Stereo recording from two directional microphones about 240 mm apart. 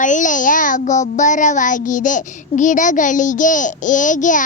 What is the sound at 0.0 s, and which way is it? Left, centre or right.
A child's voice, left.